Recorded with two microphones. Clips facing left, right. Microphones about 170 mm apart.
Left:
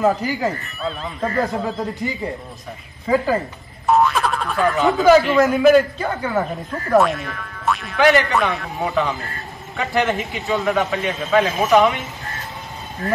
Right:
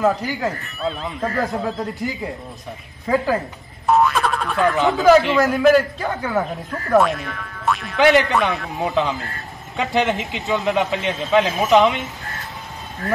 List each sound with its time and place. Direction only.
0.0 s speech: centre (ahead or behind)
8.0 s a man's voice: 20° right (ahead or behind)
8.3 s speech: centre (ahead or behind)
9.8 s a man's voice: 20° right (ahead or behind)